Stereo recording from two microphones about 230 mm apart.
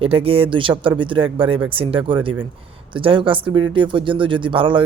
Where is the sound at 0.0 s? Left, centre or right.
Right.